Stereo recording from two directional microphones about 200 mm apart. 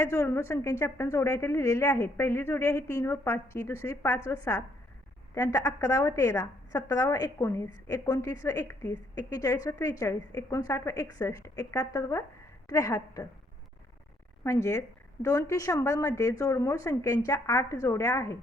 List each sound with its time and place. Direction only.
0.0 s a woman's voice: 15° left (ahead or behind)
14.4 s a woman's voice: 15° left (ahead or behind)